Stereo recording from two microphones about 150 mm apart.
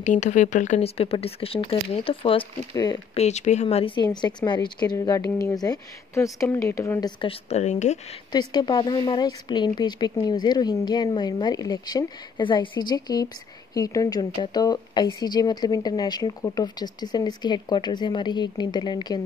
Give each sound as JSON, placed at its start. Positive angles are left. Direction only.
{"t": 0.0, "sound": "speech", "side_deg": 55}
{"t": 2.7, "sound": "a woman's voice", "side_deg": 25}
{"t": 3.2, "sound": "a woman's voice", "side_deg": 50}
{"t": 8.3, "sound": "a woman's voice", "side_deg": 30}